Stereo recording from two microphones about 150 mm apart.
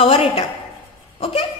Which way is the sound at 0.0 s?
40° left (ahead or behind).